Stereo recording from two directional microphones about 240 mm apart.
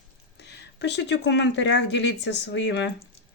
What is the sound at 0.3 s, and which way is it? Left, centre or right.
Speech, left.